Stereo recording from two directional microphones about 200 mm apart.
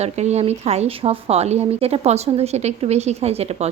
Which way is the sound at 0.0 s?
35° right (ahead or behind).